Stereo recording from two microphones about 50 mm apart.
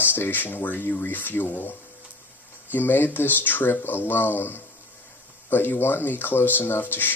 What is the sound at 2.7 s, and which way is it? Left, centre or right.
Speech, left.